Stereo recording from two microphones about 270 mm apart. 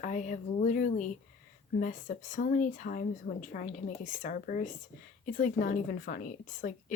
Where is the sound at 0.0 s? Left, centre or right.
Left.